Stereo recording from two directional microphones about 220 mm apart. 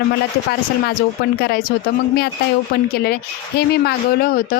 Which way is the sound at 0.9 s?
45° left (ahead or behind).